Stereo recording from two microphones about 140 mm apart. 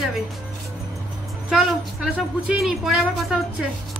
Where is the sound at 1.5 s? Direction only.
5° right (ahead or behind).